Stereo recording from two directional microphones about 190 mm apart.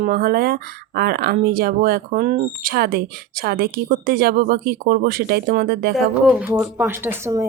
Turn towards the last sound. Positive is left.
turn(degrees=-15)  # may be behind; listen again after turning